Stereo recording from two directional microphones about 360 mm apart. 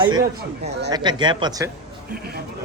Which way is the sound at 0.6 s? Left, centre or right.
Right.